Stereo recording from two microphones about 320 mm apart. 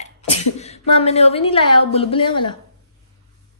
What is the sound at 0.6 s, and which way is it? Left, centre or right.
A woman's voice, centre.